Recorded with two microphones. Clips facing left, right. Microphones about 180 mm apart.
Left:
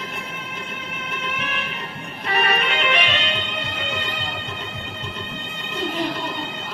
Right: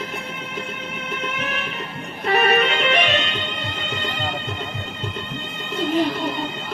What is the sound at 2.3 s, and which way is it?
Music, 45° right (ahead or behind).